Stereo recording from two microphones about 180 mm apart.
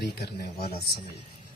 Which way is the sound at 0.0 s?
60° left (ahead or behind).